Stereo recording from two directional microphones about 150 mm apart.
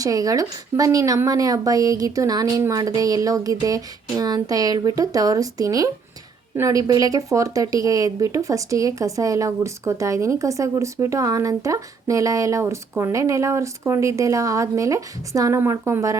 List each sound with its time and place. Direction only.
0.0 s speech: 25° right (ahead or behind)